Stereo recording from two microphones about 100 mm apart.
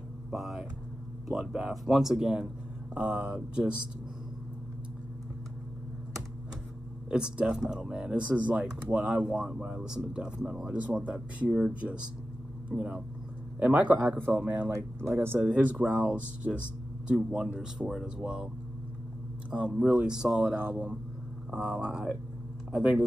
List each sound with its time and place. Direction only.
0.3 s speech: 5° right (ahead or behind)
7.1 s speech: 10° right (ahead or behind)
19.5 s speech: 10° right (ahead or behind)
20.5 s speech: 20° right (ahead or behind)